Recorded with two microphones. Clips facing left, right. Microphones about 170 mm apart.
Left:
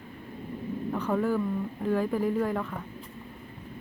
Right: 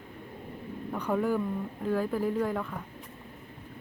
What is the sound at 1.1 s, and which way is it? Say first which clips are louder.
Speech: even; centre (ahead or behind).